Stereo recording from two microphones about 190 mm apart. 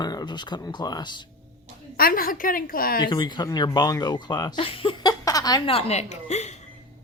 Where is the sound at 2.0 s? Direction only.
50° left (ahead or behind).